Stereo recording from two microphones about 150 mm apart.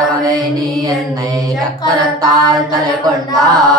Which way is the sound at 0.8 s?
25° right (ahead or behind).